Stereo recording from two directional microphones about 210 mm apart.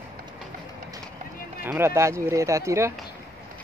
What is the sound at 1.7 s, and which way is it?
Speech, 10° right (ahead or behind).